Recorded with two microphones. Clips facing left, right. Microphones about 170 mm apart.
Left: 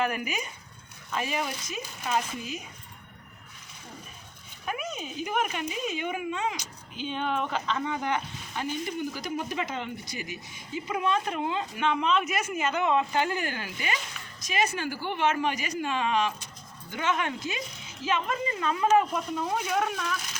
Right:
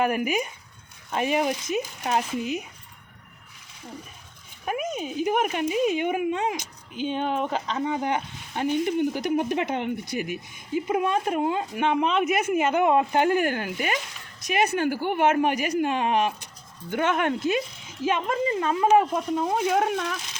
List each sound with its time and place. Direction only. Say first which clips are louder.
0.0 s speech: right 6 dB; 50° right (ahead or behind)
4.6 s speech: right 6 dB; 45° right (ahead or behind)
7.9 s speech: right 4 dB; 20° right (ahead or behind)
8.5 s speech: right 8 dB; 60° right (ahead or behind)
18.4 s speech: right 5 dB; 25° right (ahead or behind)